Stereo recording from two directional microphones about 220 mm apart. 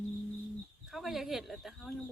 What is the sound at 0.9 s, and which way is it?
Speech, centre (ahead or behind).